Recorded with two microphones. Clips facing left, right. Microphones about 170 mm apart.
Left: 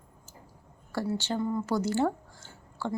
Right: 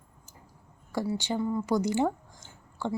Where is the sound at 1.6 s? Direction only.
15° right (ahead or behind).